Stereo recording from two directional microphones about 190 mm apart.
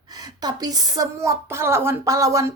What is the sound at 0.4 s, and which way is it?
A woman's voice, 20° right (ahead or behind).